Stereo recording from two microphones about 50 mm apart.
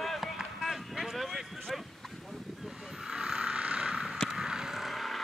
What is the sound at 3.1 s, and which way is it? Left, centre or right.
Vehicle, centre.